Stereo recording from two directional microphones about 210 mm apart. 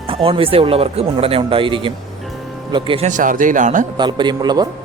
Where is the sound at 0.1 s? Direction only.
25° right (ahead or behind).